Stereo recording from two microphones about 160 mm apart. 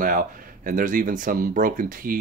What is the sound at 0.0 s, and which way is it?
Speech, 60° right (ahead or behind).